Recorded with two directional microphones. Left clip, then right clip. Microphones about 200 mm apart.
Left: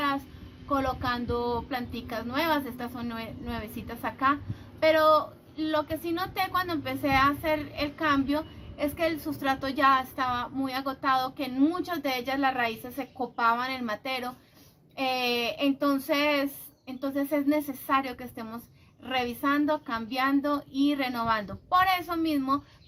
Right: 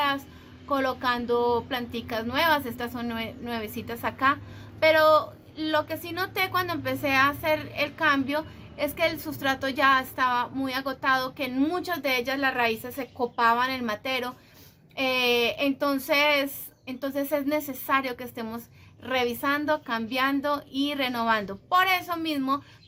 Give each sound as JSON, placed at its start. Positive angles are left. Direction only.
{"t": 0.7, "sound": "a woman's voice", "side_deg": -40}